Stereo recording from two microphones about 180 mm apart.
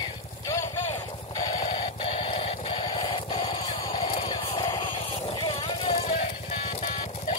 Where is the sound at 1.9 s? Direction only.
30° left (ahead or behind).